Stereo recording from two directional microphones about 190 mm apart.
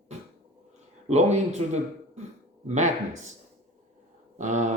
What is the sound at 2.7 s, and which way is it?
Speech, 40° right (ahead or behind).